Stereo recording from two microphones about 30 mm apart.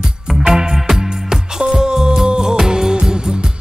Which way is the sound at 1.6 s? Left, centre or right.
Right.